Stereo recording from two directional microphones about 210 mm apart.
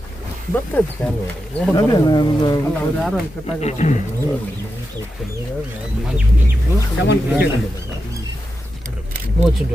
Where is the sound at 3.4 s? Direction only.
30° left (ahead or behind).